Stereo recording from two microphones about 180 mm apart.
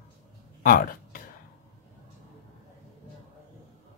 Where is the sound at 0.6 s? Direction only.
50° left (ahead or behind).